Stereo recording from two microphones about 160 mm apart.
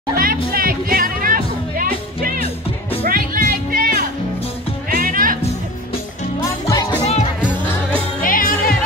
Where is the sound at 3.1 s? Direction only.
60° right (ahead or behind).